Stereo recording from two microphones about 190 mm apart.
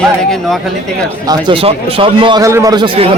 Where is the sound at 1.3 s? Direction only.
25° right (ahead or behind).